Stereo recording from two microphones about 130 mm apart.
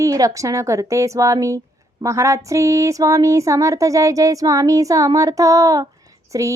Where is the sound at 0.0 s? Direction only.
25° right (ahead or behind).